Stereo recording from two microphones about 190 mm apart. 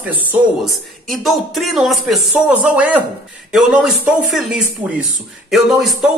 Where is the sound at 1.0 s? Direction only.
Centre (ahead or behind).